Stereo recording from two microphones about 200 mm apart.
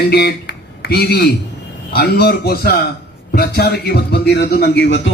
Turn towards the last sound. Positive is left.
turn(degrees=60)  # may be behind; listen again after turning